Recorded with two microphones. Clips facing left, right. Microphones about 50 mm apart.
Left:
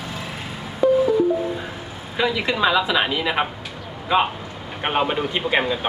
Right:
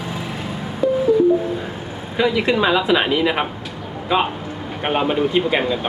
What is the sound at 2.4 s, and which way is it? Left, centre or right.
A woman's voice, centre.